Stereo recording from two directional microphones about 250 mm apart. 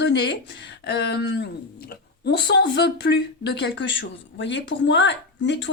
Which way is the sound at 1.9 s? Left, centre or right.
Left.